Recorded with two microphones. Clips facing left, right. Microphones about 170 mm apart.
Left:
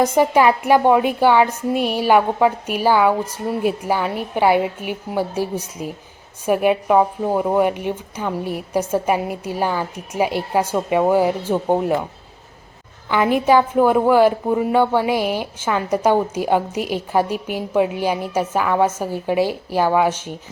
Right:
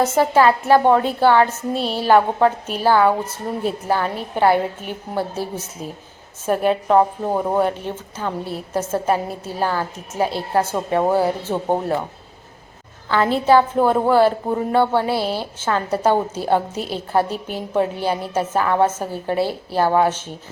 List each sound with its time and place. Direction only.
0.0 s a woman's voice: 15° left (ahead or behind)
13.1 s a woman's voice: 15° left (ahead or behind)